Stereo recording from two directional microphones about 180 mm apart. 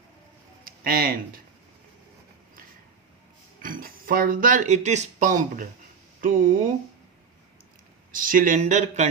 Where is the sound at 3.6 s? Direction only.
50° right (ahead or behind).